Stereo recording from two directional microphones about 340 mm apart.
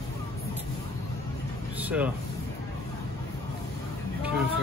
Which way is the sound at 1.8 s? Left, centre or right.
Centre.